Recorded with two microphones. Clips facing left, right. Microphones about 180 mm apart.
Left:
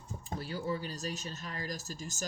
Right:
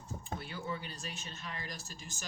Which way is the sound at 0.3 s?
35° left (ahead or behind).